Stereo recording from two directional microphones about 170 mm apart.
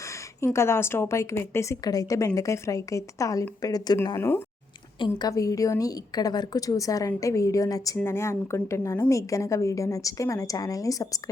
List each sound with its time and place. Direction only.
0.4 s a woman's voice: 15° left (ahead or behind)
4.9 s a woman's voice: 25° left (ahead or behind)